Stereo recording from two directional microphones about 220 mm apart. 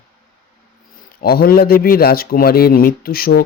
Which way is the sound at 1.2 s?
45° left (ahead or behind).